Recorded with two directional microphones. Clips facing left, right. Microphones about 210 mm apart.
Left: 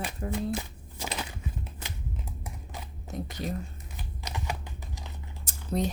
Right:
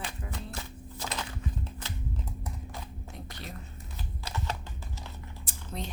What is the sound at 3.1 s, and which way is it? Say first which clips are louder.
Speech: left 11 dB; 45° left (ahead or behind).